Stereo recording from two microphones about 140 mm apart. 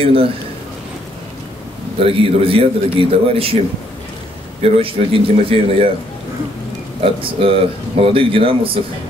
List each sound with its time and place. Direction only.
0.0 s speech: 40° right (ahead or behind)
2.0 s speech: 40° right (ahead or behind)
4.6 s speech: 40° right (ahead or behind)
7.0 s speech: 40° right (ahead or behind)